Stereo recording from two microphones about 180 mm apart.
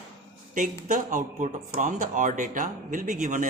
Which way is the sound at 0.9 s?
45° right (ahead or behind).